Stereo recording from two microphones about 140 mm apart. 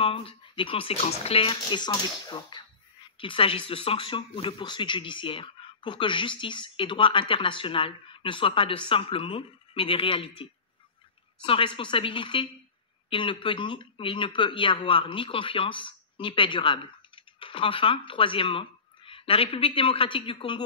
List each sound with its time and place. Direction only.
0.0 s speech: 40° left (ahead or behind)